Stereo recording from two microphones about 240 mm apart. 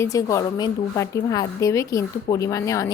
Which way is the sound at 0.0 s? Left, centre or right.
Centre.